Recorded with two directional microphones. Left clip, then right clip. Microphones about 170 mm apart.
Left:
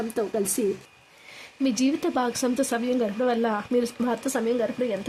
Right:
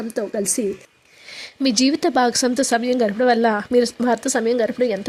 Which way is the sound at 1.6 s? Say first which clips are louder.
Right 7 dB; 30° right (ahead or behind).